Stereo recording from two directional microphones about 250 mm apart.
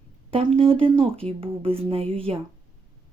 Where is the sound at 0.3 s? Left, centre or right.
Right.